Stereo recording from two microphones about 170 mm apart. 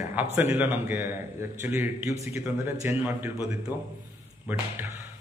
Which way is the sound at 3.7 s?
20° left (ahead or behind).